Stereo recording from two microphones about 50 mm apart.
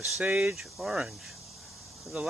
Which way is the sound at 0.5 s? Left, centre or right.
Centre.